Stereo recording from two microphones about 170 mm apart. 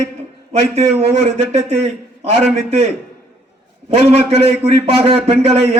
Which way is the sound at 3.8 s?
35° right (ahead or behind).